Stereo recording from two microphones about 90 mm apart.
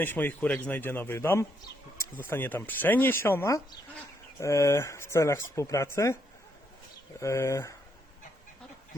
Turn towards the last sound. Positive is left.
turn(degrees=35)  # may be behind; listen again after turning